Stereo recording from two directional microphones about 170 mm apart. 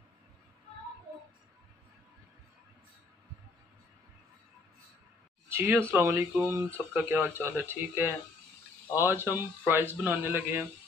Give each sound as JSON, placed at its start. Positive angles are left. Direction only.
{"t": 5.5, "sound": "a man's voice", "side_deg": -15}